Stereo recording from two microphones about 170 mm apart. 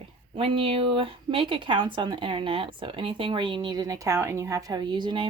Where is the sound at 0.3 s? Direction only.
35° right (ahead or behind).